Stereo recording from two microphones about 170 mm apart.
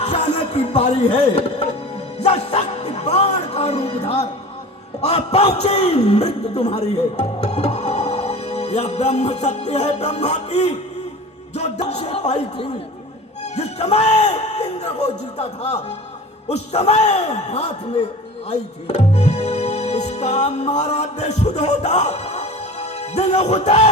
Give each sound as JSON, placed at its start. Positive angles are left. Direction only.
{"t": 0.0, "sound": "a man's voice", "side_deg": 40}
{"t": 11.5, "sound": "music", "side_deg": 40}
{"t": 13.4, "sound": "a man's voice", "side_deg": 40}
{"t": 18.9, "sound": "music", "side_deg": 40}